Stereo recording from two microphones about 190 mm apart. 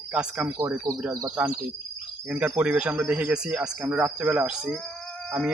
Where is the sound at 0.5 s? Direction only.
15° right (ahead or behind).